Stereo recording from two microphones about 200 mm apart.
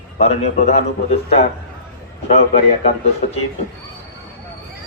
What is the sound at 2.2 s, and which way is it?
A man's voice, 30° left (ahead or behind).